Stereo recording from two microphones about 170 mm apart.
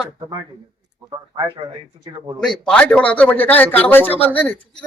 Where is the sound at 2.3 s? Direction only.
5° left (ahead or behind).